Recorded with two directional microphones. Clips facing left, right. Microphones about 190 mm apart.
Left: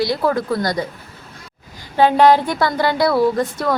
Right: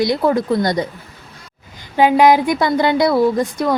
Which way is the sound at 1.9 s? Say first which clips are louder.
Right 1 dB; 10° right (ahead or behind).